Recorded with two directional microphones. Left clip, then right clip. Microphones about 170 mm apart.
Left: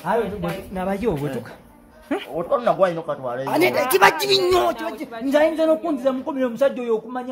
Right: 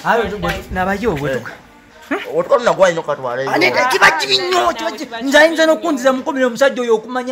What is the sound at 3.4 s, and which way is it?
Speech, 60° left (ahead or behind).